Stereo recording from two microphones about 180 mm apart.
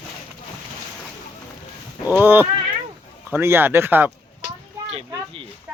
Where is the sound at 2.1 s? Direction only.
10° right (ahead or behind).